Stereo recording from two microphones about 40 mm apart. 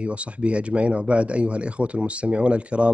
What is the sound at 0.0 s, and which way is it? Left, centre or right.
Speech, right.